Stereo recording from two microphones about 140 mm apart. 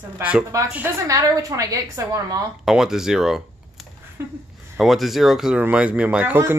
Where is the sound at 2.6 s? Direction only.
5° right (ahead or behind).